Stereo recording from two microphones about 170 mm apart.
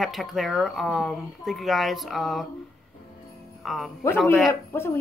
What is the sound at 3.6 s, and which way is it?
Speech, centre (ahead or behind).